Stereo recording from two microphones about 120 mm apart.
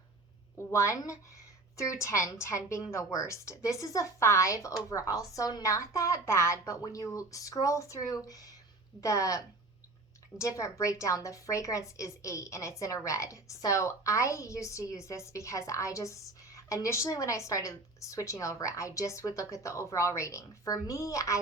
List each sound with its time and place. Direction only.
0.7 s a woman's voice: 25° left (ahead or behind)